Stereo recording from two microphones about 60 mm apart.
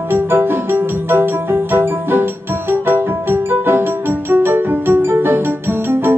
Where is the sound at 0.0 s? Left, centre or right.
Right.